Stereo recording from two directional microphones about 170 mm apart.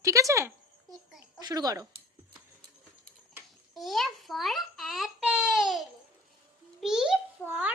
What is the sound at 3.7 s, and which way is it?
Babbling, centre (ahead or behind).